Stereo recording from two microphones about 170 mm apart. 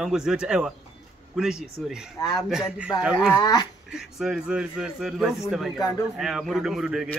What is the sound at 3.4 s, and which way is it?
Speech, 20° left (ahead or behind).